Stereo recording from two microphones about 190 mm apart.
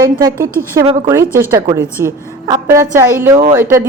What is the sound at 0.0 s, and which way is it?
A woman's voice, 20° right (ahead or behind).